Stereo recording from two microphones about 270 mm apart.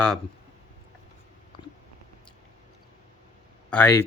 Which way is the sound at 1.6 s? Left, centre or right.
Centre.